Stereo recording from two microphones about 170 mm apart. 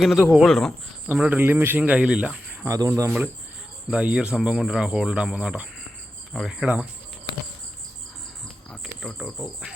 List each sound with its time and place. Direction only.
0.0 s speech: centre (ahead or behind)
1.0 s speech: 10° right (ahead or behind)
2.6 s speech: 20° right (ahead or behind)
3.8 s speech: 5° right (ahead or behind)
8.7 s cricket: centre (ahead or behind)